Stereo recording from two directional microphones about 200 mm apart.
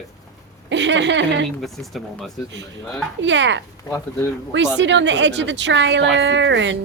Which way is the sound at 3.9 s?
20° left (ahead or behind).